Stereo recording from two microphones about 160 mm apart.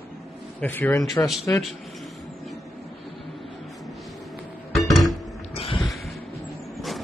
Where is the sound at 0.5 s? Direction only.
10° left (ahead or behind).